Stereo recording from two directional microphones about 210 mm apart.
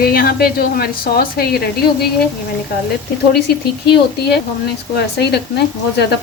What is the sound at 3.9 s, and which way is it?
Speech, 50° left (ahead or behind).